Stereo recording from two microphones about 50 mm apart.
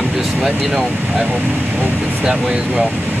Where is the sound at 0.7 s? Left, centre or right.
Right.